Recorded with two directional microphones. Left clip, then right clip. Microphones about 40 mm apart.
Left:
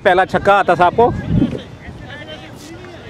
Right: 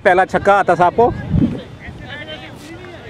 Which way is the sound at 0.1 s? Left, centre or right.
Centre.